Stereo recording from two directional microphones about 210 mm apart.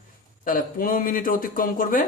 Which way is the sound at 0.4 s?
40° left (ahead or behind).